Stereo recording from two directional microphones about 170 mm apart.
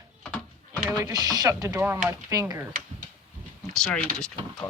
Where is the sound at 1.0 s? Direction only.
25° right (ahead or behind).